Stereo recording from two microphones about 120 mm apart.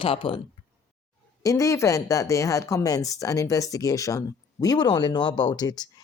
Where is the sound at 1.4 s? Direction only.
25° left (ahead or behind).